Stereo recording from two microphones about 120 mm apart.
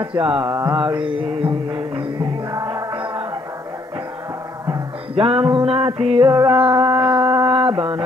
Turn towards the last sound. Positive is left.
turn(degrees=-40)  # may be behind; listen again after turning